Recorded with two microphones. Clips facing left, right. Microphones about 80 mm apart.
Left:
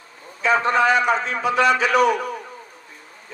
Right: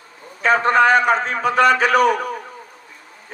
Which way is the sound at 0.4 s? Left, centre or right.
Right.